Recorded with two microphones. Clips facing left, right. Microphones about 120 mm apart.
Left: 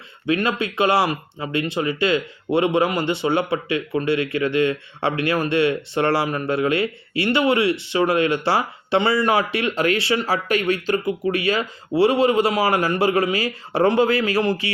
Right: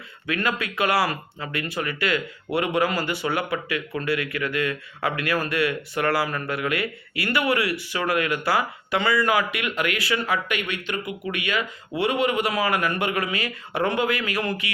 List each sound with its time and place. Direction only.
0.3 s speech: 25° left (ahead or behind)